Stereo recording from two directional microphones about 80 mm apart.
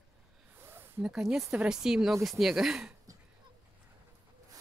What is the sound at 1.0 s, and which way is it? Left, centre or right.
Speech, centre.